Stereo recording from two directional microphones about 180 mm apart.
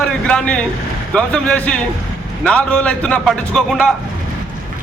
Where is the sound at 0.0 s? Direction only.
5° left (ahead or behind).